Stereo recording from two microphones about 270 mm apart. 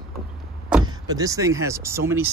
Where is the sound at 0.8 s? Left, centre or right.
Centre.